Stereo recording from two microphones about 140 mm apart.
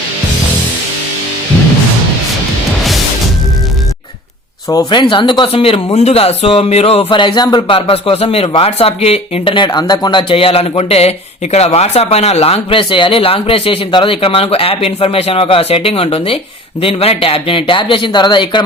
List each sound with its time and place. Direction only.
4.7 s speech: 30° left (ahead or behind)
7.8 s speech: 45° left (ahead or behind)